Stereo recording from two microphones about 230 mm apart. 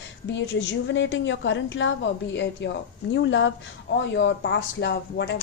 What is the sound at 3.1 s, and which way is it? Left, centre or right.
Speech, left.